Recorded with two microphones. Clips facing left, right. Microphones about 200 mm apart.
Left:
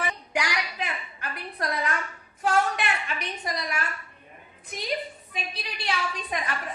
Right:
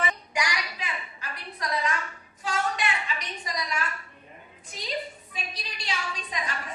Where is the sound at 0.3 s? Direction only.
60° left (ahead or behind).